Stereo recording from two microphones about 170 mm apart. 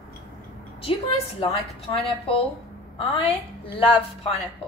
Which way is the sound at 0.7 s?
35° left (ahead or behind).